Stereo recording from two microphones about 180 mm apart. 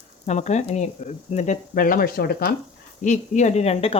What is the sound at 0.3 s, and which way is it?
Speech, 40° left (ahead or behind).